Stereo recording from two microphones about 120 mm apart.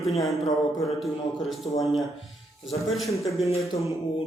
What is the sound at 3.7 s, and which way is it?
Music, 55° left (ahead or behind).